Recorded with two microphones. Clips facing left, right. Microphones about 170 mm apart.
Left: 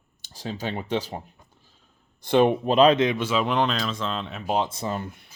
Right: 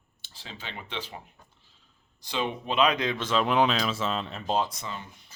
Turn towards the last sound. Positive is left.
turn(degrees=55)  # may be behind; listen again after turning